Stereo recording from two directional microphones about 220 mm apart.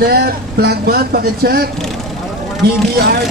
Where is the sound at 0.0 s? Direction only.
45° right (ahead or behind).